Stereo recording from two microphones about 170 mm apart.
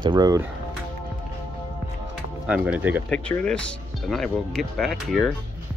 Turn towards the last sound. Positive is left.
turn(degrees=0)  # may be behind; listen again after turning